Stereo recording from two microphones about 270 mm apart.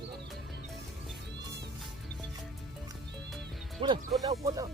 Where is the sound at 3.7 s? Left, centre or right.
Centre.